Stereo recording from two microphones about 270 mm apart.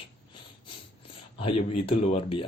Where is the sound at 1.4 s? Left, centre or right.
Centre.